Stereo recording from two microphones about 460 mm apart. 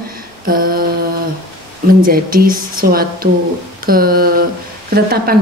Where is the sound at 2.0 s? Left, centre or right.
Centre.